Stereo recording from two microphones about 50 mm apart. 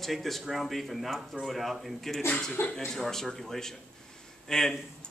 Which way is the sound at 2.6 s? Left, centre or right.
Left.